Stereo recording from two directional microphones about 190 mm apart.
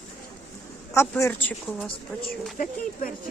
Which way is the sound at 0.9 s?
10° left (ahead or behind).